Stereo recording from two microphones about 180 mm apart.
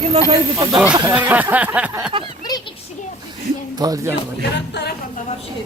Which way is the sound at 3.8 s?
20° right (ahead or behind).